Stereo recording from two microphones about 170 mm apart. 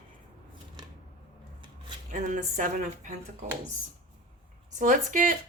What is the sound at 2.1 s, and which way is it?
A woman's voice, 50° right (ahead or behind).